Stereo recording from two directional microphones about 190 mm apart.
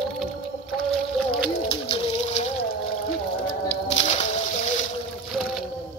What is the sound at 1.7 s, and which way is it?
Bird, 30° left (ahead or behind).